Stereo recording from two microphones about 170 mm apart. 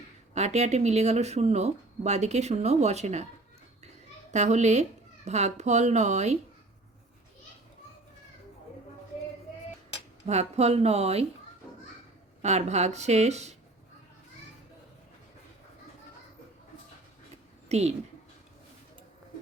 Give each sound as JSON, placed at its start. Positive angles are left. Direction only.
{"t": 0.3, "sound": "speech", "side_deg": -40}
{"t": 4.3, "sound": "speech", "side_deg": -40}
{"t": 10.2, "sound": "speech", "side_deg": -40}
{"t": 12.4, "sound": "speech", "side_deg": -40}
{"t": 17.7, "sound": "speech", "side_deg": -40}